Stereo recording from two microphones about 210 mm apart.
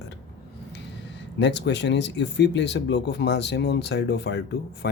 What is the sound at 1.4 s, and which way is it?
Speech, 55° left (ahead or behind).